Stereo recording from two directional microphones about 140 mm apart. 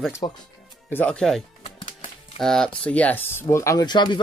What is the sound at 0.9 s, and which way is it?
Speech, 10° left (ahead or behind).